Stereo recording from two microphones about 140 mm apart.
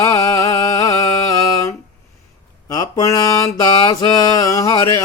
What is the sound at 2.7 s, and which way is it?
Mantra, 25° left (ahead or behind).